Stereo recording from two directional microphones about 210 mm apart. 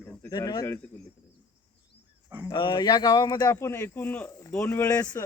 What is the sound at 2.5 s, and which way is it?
Speech, 20° left (ahead or behind).